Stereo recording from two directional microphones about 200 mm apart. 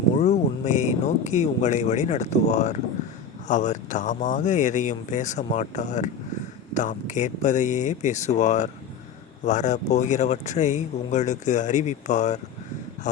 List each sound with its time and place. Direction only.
0.2 s speech: 35° left (ahead or behind)